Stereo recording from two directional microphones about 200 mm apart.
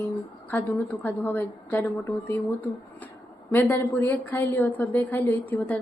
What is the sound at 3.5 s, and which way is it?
A woman's voice, 10° left (ahead or behind).